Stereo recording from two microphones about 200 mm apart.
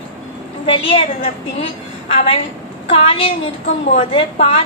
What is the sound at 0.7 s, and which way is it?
Speech, 25° left (ahead or behind).